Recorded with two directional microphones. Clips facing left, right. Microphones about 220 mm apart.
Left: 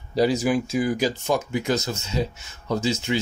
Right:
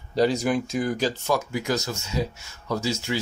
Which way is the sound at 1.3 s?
20° left (ahead or behind).